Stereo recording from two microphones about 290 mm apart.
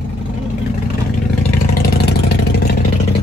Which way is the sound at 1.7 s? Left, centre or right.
Left.